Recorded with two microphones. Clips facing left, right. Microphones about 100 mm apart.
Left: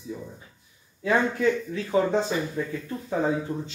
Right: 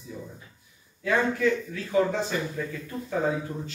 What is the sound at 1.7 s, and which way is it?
Speech, 20° left (ahead or behind).